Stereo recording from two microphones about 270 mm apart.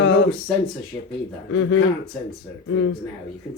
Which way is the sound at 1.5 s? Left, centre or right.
Left.